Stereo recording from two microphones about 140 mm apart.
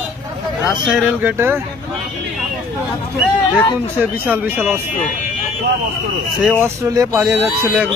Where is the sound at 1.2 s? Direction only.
15° right (ahead or behind).